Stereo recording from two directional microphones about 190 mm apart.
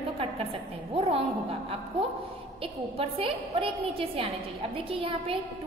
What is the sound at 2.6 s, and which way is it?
A woman's voice, 30° right (ahead or behind).